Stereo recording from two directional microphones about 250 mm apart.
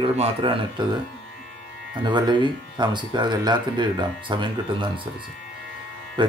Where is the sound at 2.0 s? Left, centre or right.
Centre.